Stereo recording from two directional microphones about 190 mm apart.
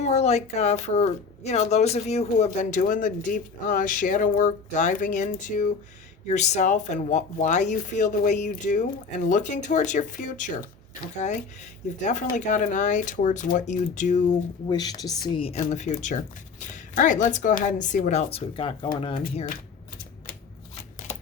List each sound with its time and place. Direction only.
0.0 s speech: 35° left (ahead or behind)
14.7 s speech: 20° left (ahead or behind)